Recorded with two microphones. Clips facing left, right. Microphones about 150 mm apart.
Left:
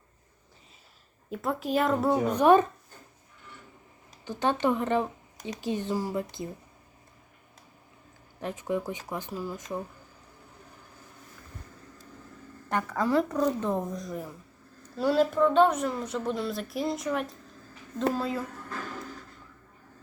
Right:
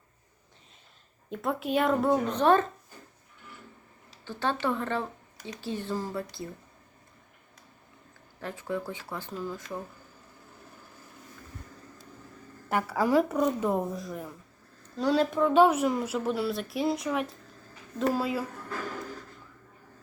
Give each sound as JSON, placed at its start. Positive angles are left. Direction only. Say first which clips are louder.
{"t": 1.3, "sound": "speech", "louder": "even", "side_deg": 0}
{"t": 2.1, "sound": "speech", "louder": "left 6 dB", "side_deg": 10}
{"t": 4.3, "sound": "speech", "louder": "left 3 dB", "side_deg": 15}
{"t": 8.4, "sound": "speech", "louder": "left 3 dB", "side_deg": 15}
{"t": 12.6, "sound": "a woman's voice", "louder": "right 1 dB", "side_deg": -10}